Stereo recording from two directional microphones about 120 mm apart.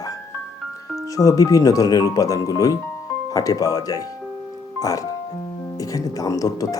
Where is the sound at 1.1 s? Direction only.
30° left (ahead or behind).